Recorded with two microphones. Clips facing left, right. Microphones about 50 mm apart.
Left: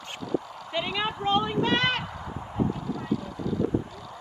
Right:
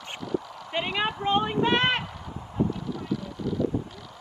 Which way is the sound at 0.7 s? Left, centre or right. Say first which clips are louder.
Right 1 dB; right.